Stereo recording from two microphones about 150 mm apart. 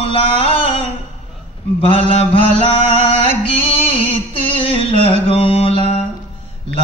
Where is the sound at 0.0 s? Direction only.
40° left (ahead or behind).